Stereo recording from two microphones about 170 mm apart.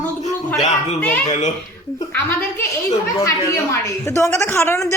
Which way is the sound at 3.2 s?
20° left (ahead or behind).